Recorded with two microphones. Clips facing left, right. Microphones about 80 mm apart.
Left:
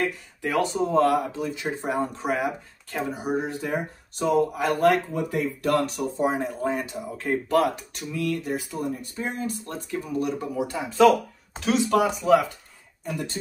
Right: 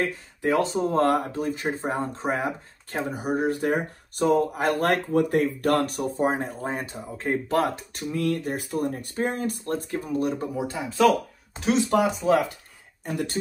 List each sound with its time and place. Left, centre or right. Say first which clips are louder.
0.1 s speech: right 2 dB; right
3.2 s speech: right 6 dB; right
4.8 s speech: left 3 dB; right
10.5 s speech: left 1 dB; right
13.1 s speech: right 3 dB; right